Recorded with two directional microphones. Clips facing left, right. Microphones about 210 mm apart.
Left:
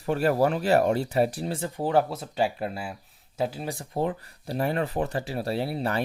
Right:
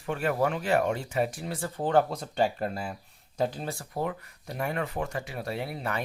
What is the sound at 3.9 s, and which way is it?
Speech, 30° left (ahead or behind).